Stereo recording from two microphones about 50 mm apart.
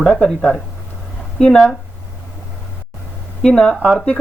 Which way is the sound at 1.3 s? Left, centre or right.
Centre.